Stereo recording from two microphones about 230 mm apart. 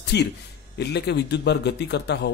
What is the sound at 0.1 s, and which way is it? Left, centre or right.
A man's voice, left.